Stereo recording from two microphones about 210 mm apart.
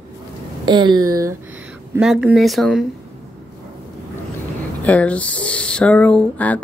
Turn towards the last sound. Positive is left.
turn(degrees=5)  # may be behind; listen again after turning